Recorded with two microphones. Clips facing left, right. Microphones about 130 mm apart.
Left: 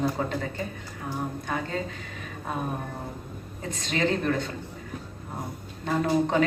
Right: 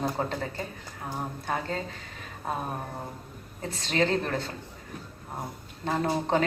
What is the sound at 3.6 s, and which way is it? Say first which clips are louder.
Speech: right 1 dB; 30° right (ahead or behind).